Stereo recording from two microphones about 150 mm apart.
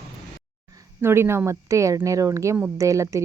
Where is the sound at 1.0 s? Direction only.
15° right (ahead or behind).